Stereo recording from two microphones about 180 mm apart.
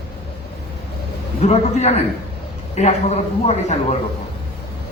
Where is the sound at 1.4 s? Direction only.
35° left (ahead or behind).